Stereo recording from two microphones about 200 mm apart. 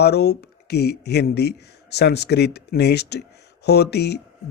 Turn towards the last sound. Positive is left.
turn(degrees=55)  # may be behind; listen again after turning